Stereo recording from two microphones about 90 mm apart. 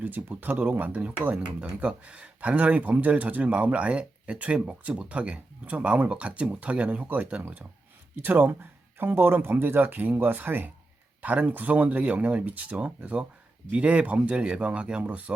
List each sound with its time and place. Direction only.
0.0 s speech: 20° right (ahead or behind)